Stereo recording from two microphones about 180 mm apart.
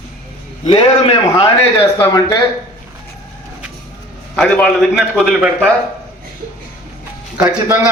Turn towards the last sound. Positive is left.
turn(degrees=-20)  # may be behind; listen again after turning